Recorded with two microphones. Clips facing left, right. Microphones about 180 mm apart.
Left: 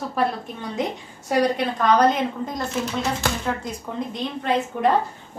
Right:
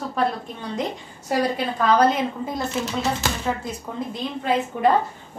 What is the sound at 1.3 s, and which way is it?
A woman's voice, centre (ahead or behind).